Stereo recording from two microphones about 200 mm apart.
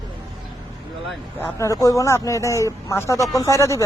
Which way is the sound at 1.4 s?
15° left (ahead or behind).